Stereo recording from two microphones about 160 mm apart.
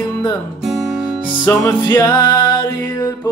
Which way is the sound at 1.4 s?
15° left (ahead or behind).